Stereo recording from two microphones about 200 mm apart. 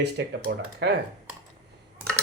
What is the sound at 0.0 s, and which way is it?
Speech, 55° right (ahead or behind).